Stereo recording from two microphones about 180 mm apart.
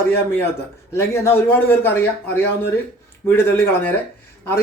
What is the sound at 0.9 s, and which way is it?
A man's voice, 15° left (ahead or behind).